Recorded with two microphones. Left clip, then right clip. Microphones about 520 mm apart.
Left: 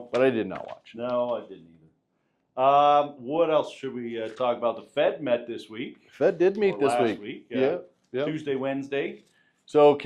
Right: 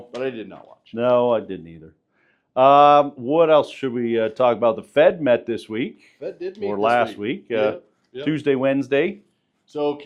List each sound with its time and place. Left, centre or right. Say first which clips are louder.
0.1 s speech: left 5 dB; centre
0.9 s speech: right 10 dB; right
2.5 s speech: right 7 dB; right
6.1 s speech: left 9 dB; left
6.9 s speech: right 5 dB; right
7.5 s speech: right 3 dB; centre
8.3 s speech: right 9 dB; right
9.7 s speech: left 6 dB; left